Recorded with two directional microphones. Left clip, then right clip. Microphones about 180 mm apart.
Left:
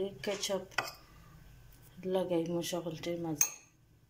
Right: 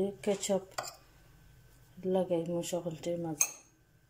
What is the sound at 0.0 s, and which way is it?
Speech, 15° right (ahead or behind).